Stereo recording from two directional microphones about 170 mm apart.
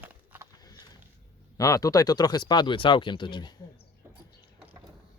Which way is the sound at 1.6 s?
20° left (ahead or behind).